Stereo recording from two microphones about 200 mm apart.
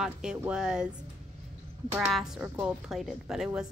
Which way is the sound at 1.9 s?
Centre (ahead or behind).